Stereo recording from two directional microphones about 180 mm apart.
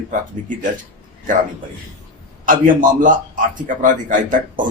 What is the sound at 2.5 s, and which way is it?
Speech, 50° right (ahead or behind).